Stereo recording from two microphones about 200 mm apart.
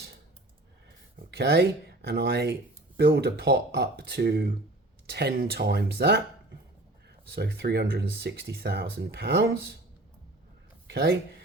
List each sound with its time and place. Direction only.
1.3 s speech: 55° right (ahead or behind)
7.3 s speech: 50° right (ahead or behind)
10.8 s speech: 55° right (ahead or behind)